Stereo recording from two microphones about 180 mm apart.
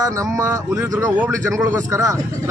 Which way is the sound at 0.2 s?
15° right (ahead or behind).